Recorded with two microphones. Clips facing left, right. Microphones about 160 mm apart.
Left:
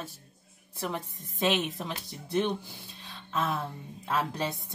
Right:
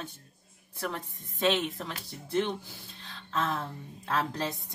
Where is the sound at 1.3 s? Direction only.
15° left (ahead or behind).